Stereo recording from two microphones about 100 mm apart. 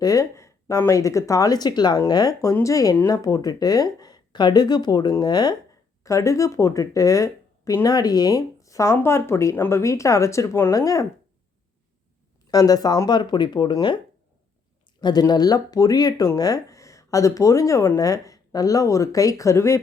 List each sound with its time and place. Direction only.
0.0 s speech: 35° left (ahead or behind)
6.0 s speech: 30° left (ahead or behind)
12.5 s speech: 40° left (ahead or behind)
15.0 s speech: 45° left (ahead or behind); by 19.8 s 30° left (ahead or behind)